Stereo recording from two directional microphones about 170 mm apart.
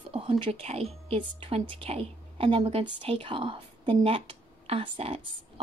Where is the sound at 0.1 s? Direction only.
35° right (ahead or behind).